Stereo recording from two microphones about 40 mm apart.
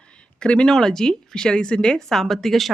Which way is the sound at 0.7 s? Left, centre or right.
Centre.